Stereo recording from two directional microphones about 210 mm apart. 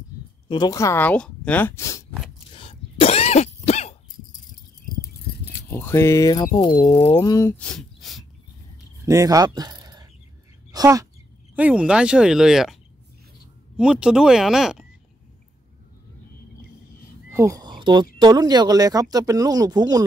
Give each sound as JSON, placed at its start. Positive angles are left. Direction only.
{"t": 0.5, "sound": "speech", "side_deg": 20}
{"t": 2.5, "sound": "cough", "side_deg": 25}
{"t": 5.7, "sound": "speech", "side_deg": 10}
{"t": 9.0, "sound": "a woman's voice", "side_deg": -15}
{"t": 11.5, "sound": "speech", "side_deg": -5}
{"t": 13.7, "sound": "speech", "side_deg": -5}
{"t": 17.3, "sound": "a sound", "side_deg": -15}
{"t": 18.2, "sound": "speech", "side_deg": -20}